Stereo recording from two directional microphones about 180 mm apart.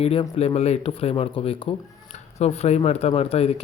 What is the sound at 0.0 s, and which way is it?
Speech, 30° left (ahead or behind).